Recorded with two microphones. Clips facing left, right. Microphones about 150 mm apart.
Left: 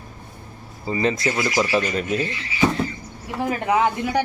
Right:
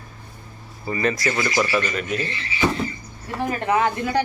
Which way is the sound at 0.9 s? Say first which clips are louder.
Left 1 dB; 20° left (ahead or behind).